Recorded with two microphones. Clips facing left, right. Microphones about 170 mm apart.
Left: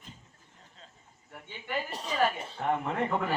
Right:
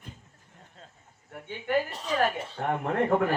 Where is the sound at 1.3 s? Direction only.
55° right (ahead or behind).